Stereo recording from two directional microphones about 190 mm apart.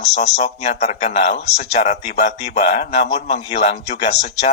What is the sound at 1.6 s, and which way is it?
Speech, 40° left (ahead or behind).